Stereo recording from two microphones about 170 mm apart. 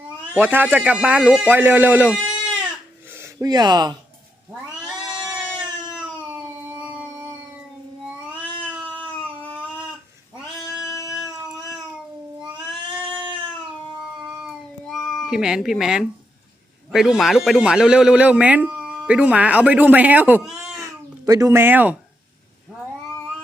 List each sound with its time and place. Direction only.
0.3 s speech: 10° right (ahead or behind)
6.0 s a sound: 10° right (ahead or behind)
8.6 s cat: 10° right (ahead or behind)
10.8 s music: 15° left (ahead or behind)
14.4 s cat: centre (ahead or behind)
16.9 s speech: centre (ahead or behind)
20.8 s babbling: 20° right (ahead or behind)